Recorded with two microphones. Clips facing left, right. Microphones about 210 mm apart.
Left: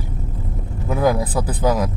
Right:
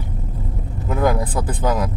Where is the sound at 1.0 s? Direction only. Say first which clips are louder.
Left 1 dB; 5° left (ahead or behind).